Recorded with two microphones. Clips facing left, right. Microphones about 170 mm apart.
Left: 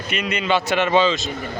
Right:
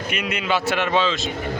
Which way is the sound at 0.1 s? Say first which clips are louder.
Left 3 dB; 10° right (ahead or behind).